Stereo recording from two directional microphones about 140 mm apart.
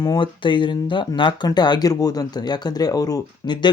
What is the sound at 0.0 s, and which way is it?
Speech, 35° left (ahead or behind).